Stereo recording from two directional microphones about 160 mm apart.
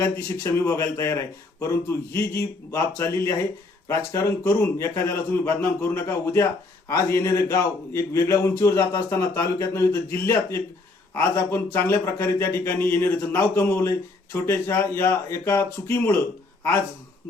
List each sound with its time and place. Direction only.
0.0 s a man's voice: 15° left (ahead or behind)